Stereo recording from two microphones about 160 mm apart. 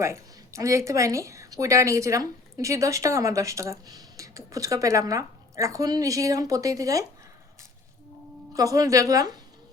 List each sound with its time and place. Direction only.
0.0 s a woman's voice: 20° right (ahead or behind)
8.5 s a woman's voice: 20° right (ahead or behind)